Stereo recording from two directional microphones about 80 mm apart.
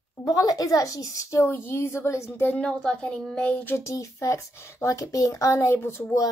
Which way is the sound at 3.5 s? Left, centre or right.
Left.